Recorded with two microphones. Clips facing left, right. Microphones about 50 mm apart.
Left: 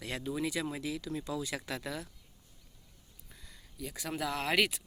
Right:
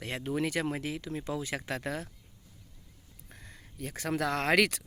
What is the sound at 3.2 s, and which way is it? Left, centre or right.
Speech, right.